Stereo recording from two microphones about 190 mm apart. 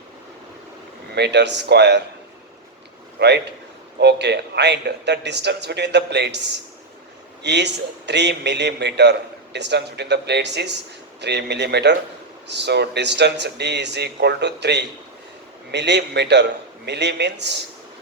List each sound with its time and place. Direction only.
1.1 s a man's voice: 65° right (ahead or behind)
3.2 s a man's voice: 60° right (ahead or behind)
7.4 s a man's voice: 65° right (ahead or behind)